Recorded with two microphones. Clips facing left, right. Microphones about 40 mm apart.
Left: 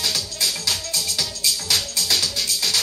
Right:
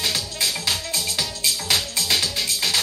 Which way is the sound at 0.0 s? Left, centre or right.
Right.